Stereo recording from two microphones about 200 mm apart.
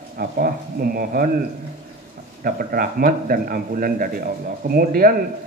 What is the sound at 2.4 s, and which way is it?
A man's voice, 45° right (ahead or behind).